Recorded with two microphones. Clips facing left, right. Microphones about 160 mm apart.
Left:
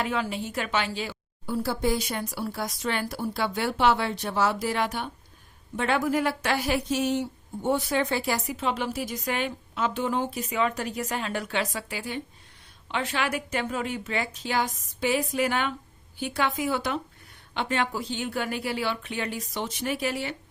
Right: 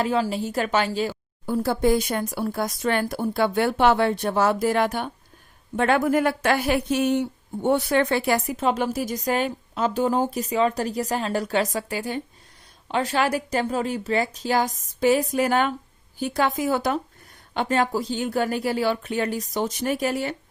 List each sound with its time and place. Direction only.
0.0 s a woman's voice: 35° right (ahead or behind)